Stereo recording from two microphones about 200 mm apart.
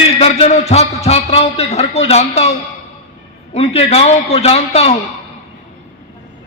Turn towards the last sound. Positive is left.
turn(degrees=30)  # may be behind; listen again after turning